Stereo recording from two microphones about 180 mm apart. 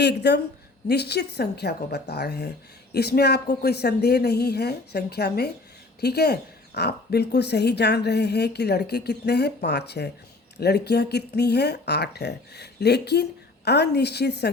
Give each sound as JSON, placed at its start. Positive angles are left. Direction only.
{"t": 0.0, "sound": "a woman's voice", "side_deg": 70}